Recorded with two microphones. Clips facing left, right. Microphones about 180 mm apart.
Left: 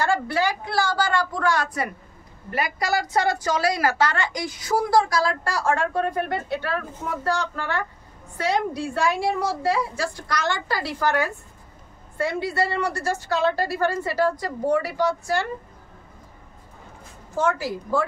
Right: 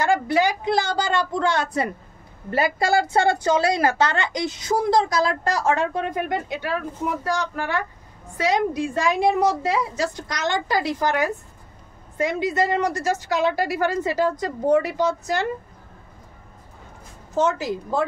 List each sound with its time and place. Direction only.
0.0 s a woman's voice: 15° right (ahead or behind)
17.3 s a woman's voice: 20° right (ahead or behind)